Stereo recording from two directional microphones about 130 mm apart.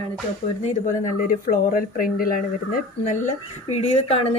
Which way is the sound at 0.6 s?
85° left.